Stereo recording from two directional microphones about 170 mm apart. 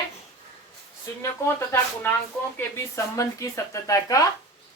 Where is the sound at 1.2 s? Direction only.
15° left (ahead or behind).